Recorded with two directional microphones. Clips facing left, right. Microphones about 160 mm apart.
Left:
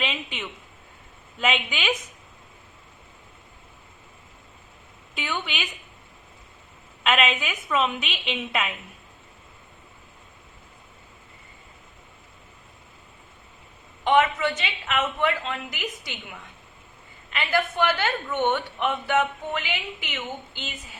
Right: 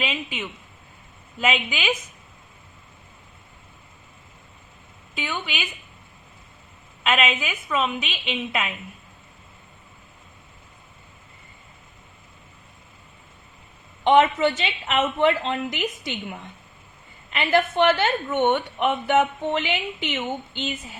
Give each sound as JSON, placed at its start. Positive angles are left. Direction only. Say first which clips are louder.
{"t": 0.0, "sound": "a woman's voice", "louder": "right 2 dB", "side_deg": -5}
{"t": 5.1, "sound": "a woman's voice", "louder": "right 1 dB", "side_deg": 0}
{"t": 7.0, "sound": "a woman's voice", "louder": "even", "side_deg": 0}
{"t": 14.0, "sound": "a woman's voice", "louder": "right 4 dB", "side_deg": -25}
{"t": 17.3, "sound": "a woman's voice", "louder": "right 4 dB", "side_deg": -25}